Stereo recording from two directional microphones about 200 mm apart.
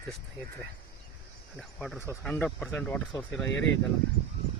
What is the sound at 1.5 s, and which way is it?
Speech, centre (ahead or behind).